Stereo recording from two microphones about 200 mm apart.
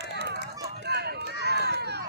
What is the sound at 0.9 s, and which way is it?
Run, 55° right (ahead or behind).